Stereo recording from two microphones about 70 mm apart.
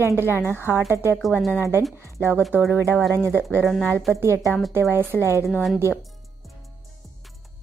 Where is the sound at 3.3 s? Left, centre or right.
Left.